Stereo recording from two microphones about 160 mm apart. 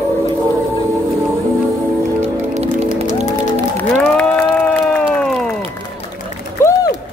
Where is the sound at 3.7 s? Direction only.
10° left (ahead or behind).